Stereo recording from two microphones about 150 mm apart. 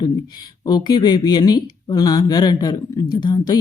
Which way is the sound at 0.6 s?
30° left (ahead or behind).